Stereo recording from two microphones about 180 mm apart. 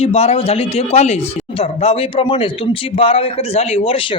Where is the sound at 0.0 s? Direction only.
35° left (ahead or behind).